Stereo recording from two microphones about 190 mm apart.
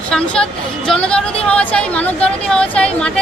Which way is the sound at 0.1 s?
5° left (ahead or behind).